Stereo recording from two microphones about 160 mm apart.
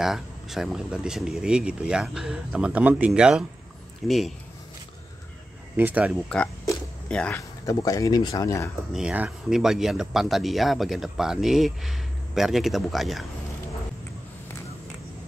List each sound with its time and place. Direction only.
0.0 s speech: centre (ahead or behind)
5.8 s speech: 10° right (ahead or behind)
6.2 s speech: 5° left (ahead or behind)
7.3 s speech: 20° left (ahead or behind)
8.9 s speech: 5° right (ahead or behind)